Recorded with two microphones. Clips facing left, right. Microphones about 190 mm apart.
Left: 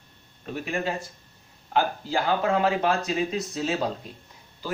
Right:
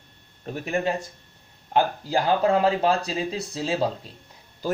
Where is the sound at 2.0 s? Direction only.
40° right (ahead or behind).